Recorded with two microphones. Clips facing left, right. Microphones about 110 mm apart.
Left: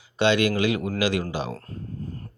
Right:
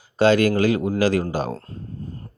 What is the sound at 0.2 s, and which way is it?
Speech, 40° right (ahead or behind).